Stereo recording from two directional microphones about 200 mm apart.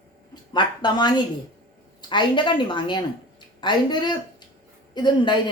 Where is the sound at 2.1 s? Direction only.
25° left (ahead or behind).